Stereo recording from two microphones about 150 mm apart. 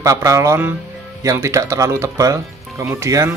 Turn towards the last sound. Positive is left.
turn(degrees=-20)  # may be behind; listen again after turning